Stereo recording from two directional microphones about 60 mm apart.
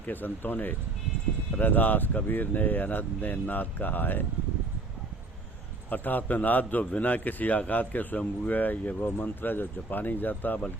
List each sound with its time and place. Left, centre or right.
0.0 s speech: left
5.9 s a man's voice: left